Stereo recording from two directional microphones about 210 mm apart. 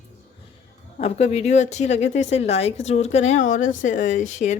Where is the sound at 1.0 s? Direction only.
30° left (ahead or behind).